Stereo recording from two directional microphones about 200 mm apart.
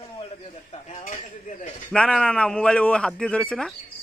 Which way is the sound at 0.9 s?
35° left (ahead or behind).